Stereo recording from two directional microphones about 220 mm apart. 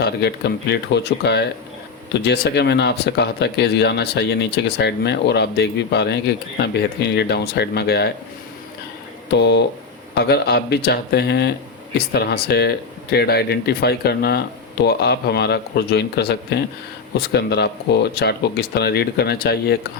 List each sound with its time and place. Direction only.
0.0 s speech: 45° left (ahead or behind)
9.3 s speech: 50° left (ahead or behind)